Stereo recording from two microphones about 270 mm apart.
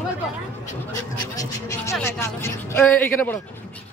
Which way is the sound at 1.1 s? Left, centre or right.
Centre.